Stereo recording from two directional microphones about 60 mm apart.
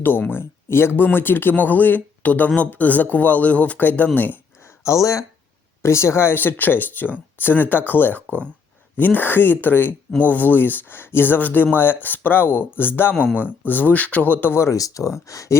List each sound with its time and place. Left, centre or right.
0.0 s speech: left
4.6 s a sound: left
5.8 s speech: left
14.5 s speech: left
14.8 s speech: left